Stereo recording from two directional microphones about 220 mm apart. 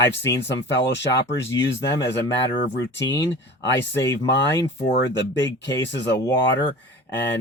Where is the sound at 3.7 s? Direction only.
55° left (ahead or behind).